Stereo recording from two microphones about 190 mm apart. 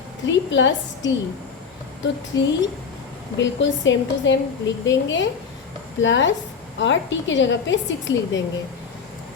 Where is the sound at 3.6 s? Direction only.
75° left (ahead or behind).